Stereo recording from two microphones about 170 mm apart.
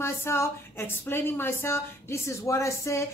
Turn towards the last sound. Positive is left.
turn(degrees=15)  # may be behind; listen again after turning